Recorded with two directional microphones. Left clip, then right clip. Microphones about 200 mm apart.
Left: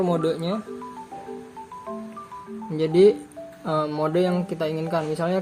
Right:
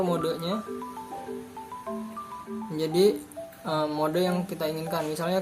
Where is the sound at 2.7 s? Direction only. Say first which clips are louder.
Left 6 dB; 40° left (ahead or behind).